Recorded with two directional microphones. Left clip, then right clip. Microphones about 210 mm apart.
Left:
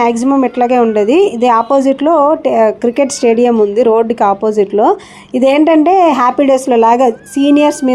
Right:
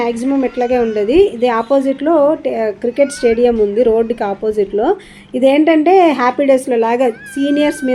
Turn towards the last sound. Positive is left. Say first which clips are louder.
# left 5 dB
turn(degrees=25)  # may be behind; listen again after turning